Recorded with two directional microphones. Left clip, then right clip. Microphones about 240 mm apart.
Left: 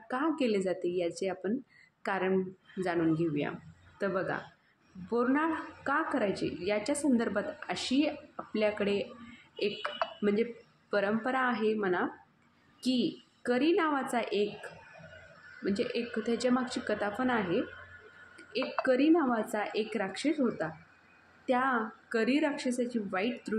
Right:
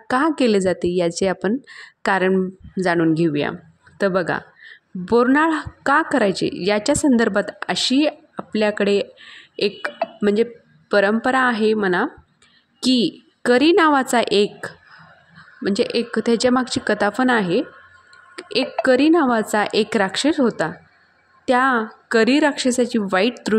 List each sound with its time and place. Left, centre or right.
0.1 s a woman's voice: right
10.2 s a woman's voice: right
15.6 s a woman's voice: right